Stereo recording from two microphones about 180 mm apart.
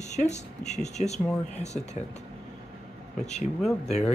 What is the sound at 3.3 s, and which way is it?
Speech, centre (ahead or behind).